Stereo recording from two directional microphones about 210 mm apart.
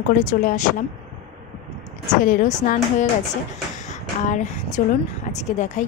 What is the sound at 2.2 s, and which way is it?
A woman's voice, 35° left (ahead or behind).